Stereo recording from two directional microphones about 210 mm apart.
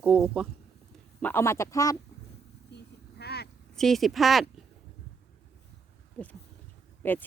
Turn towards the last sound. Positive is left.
turn(degrees=10)  # may be behind; listen again after turning